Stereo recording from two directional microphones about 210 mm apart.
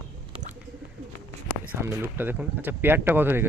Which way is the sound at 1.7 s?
10° right (ahead or behind).